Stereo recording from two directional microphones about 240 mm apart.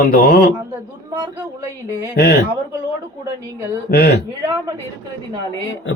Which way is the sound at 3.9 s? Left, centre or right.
Left.